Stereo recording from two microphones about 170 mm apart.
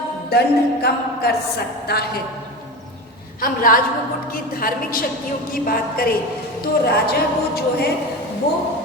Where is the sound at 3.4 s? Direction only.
55° left (ahead or behind).